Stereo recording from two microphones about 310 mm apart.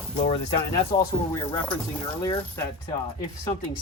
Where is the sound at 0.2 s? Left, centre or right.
Left.